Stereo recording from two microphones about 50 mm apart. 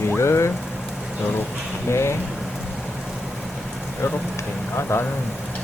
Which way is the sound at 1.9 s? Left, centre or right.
Left.